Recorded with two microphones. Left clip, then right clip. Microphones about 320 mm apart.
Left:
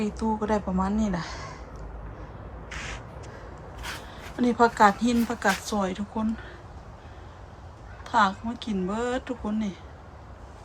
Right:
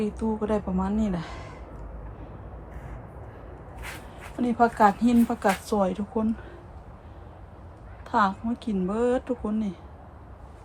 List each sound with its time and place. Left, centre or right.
0.0 s speech: centre
2.7 s a sound: right
4.4 s speech: centre
8.0 s speech: centre